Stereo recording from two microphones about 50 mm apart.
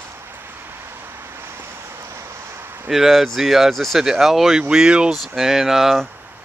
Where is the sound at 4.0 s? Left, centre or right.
Centre.